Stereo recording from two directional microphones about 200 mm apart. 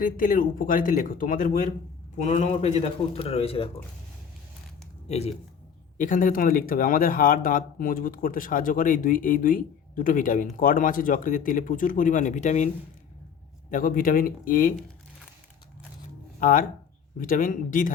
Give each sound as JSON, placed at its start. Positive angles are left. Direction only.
{"t": 0.0, "sound": "a man's voice", "side_deg": 45}
{"t": 5.0, "sound": "speech", "side_deg": 30}
{"t": 6.0, "sound": "speech", "side_deg": 40}
{"t": 16.4, "sound": "a man's voice", "side_deg": 45}